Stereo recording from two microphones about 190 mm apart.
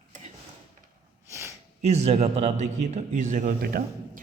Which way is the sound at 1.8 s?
35° right (ahead or behind).